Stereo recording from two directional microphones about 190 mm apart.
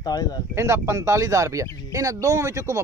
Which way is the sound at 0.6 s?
15° right (ahead or behind).